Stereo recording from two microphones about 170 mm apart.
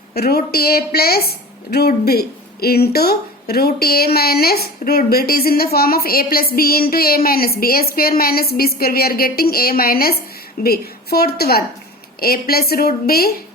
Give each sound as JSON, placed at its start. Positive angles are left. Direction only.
{"t": 0.1, "sound": "speech", "side_deg": 65}